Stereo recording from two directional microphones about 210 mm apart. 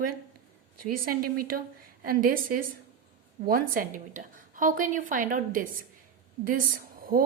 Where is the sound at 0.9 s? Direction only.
45° right (ahead or behind).